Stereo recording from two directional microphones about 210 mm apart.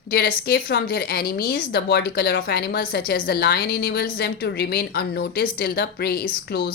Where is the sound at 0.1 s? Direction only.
45° left (ahead or behind).